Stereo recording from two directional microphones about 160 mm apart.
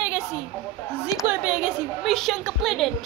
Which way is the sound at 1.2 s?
10° right (ahead or behind).